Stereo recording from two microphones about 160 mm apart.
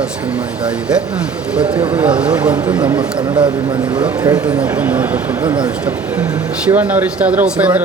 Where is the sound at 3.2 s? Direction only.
30° right (ahead or behind).